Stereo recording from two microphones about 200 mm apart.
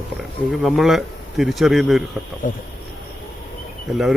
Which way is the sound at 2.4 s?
40° left (ahead or behind).